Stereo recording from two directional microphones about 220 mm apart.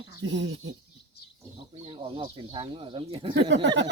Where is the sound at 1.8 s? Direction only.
25° right (ahead or behind).